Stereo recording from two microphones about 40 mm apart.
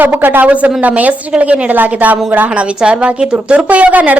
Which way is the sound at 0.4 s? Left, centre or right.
Right.